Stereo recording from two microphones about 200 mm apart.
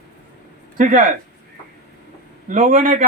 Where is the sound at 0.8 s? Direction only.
40° right (ahead or behind).